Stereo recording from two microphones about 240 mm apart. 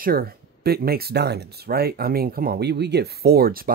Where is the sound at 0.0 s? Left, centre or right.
Right.